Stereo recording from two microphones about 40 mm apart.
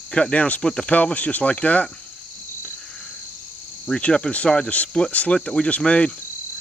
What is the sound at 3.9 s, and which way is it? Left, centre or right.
Speech, left.